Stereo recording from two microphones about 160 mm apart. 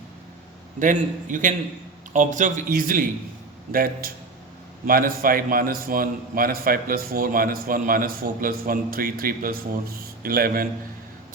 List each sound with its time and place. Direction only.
0.8 s a man's voice: 55° right (ahead or behind)